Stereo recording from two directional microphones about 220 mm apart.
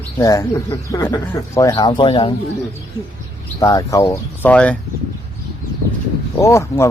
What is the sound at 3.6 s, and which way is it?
A man's voice, 15° left (ahead or behind).